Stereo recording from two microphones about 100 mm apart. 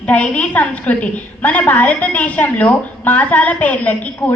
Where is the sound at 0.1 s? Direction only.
15° left (ahead or behind).